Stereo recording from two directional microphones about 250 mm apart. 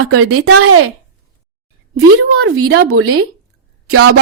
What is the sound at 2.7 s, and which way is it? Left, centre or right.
Speech, right.